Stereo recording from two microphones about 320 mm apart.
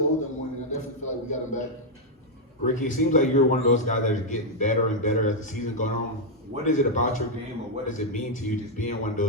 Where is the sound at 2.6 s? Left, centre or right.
Left.